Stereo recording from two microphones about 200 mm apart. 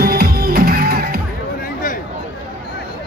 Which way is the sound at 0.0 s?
50° right (ahead or behind).